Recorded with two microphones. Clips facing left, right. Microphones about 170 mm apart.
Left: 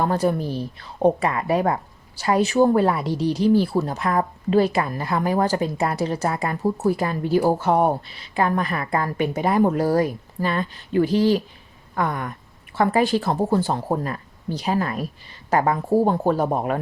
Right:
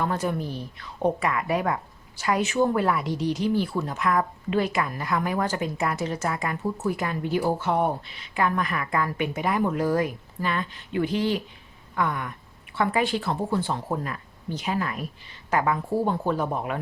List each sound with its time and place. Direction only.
0.0 s a woman's voice: 35° left (ahead or behind)